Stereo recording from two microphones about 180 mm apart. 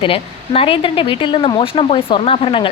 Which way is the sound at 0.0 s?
30° left (ahead or behind).